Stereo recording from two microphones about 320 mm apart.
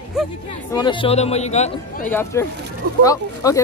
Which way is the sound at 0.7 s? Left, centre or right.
Centre.